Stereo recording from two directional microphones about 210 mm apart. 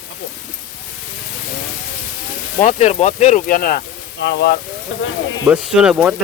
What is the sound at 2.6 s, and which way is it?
Speech, 30° left (ahead or behind).